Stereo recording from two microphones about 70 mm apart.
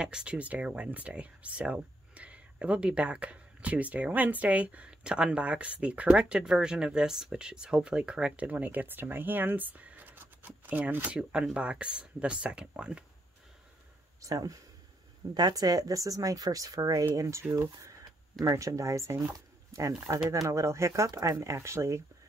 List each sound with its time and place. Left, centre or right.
0.0 s speech: centre
14.2 s speech: right
15.3 s speech: right
20.3 s speech: right